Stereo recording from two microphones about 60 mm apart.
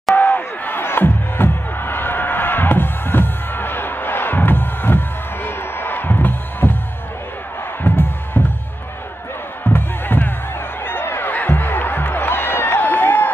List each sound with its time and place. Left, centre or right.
0.1 s music: left
7.8 s music: left
9.7 s music: left